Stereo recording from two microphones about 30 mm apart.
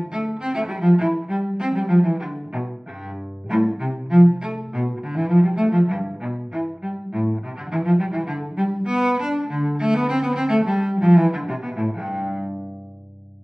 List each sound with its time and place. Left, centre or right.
0.2 s music: centre
1.1 s cello: centre